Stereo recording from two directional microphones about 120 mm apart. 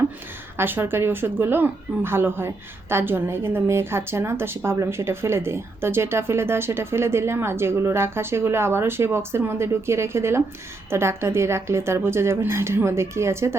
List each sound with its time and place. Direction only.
0.5 s a woman's voice: 20° right (ahead or behind)